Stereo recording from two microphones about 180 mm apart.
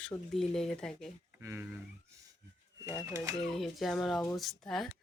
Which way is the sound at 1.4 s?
15° right (ahead or behind).